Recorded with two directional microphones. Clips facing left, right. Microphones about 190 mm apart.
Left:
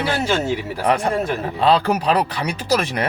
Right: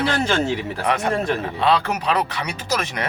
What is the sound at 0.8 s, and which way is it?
Speech, 30° left (ahead or behind).